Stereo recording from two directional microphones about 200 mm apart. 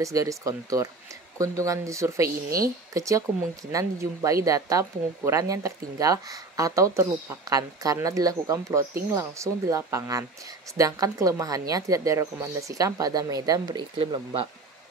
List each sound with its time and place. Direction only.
0.0 s speech: 15° right (ahead or behind)
2.2 s speech: 45° right (ahead or behind)
2.9 s speech: 15° right (ahead or behind)